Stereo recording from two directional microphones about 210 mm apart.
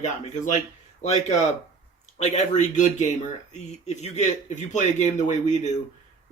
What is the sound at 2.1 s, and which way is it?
A man's voice, 30° left (ahead or behind).